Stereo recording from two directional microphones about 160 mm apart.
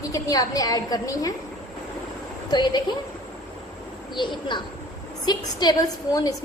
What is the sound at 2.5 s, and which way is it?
Speech, 25° left (ahead or behind).